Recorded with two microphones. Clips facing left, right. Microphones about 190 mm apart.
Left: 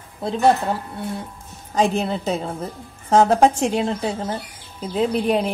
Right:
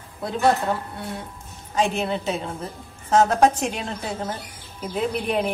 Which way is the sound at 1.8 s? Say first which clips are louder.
Left 3 dB; 35° left (ahead or behind).